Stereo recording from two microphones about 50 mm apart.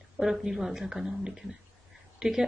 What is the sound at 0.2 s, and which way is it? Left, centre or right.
Speech, centre.